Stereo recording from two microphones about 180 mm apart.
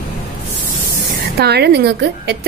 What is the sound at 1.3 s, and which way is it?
A woman's voice, 65° right (ahead or behind).